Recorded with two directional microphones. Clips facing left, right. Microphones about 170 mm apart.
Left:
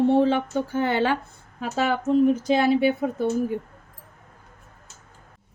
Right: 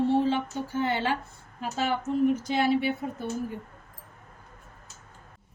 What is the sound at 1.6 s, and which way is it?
Speech, 90° left.